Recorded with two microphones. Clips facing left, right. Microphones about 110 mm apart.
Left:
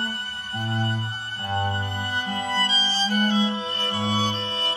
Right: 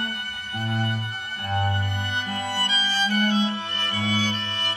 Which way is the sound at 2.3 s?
25° left (ahead or behind).